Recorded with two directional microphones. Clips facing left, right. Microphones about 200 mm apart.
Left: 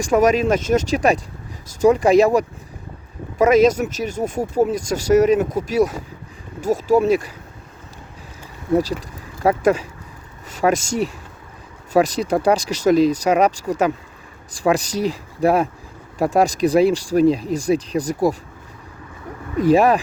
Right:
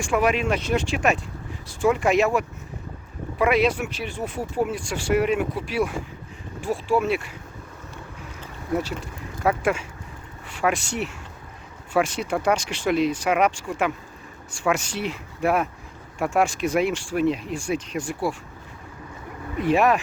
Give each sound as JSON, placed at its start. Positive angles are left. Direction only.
{"t": 0.0, "sound": "speech", "side_deg": 40}
{"t": 8.7, "sound": "speech", "side_deg": 35}
{"t": 19.5, "sound": "speech", "side_deg": 40}